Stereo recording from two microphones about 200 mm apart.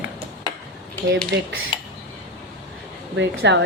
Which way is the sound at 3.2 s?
60° right (ahead or behind).